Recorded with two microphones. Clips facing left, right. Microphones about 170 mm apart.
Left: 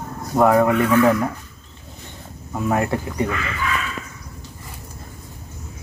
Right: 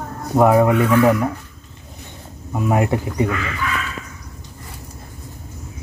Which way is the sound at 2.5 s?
15° right (ahead or behind).